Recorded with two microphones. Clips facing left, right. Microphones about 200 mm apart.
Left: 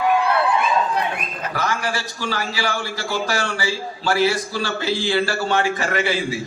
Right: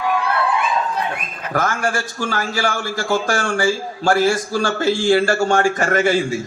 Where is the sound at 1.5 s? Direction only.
50° right (ahead or behind).